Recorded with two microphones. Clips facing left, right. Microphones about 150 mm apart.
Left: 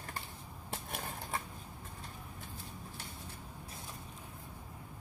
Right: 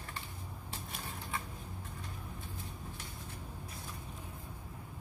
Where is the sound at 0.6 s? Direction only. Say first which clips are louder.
Left 5 dB; 55° left (ahead or behind).